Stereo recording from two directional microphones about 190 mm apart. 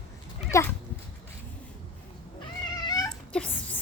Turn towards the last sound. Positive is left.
turn(degrees=5)  # may be behind; listen again after turning